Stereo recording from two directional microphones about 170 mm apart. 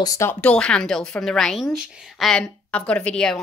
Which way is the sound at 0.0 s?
20° left (ahead or behind).